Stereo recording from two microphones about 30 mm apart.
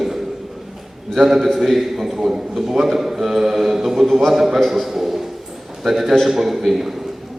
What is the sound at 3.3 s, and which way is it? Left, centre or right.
Mantra, centre.